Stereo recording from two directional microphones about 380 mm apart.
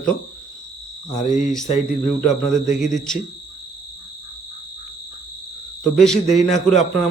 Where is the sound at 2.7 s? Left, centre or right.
Centre.